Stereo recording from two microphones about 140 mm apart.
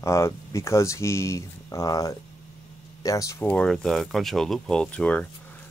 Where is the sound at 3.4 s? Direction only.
5° left (ahead or behind).